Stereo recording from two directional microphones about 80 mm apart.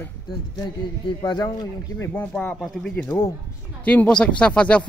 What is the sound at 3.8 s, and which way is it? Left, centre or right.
Speech, centre.